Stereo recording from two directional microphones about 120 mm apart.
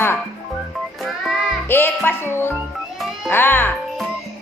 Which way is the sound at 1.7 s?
15° left (ahead or behind).